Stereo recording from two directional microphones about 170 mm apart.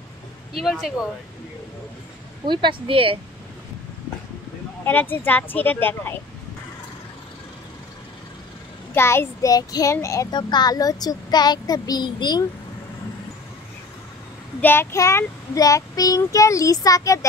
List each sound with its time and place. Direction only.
0.6 s speech: centre (ahead or behind)
2.4 s speech: 25° right (ahead or behind)
4.8 s speech: 10° left (ahead or behind)
8.9 s a child's voice: 15° left (ahead or behind)
14.6 s a child's voice: 15° left (ahead or behind)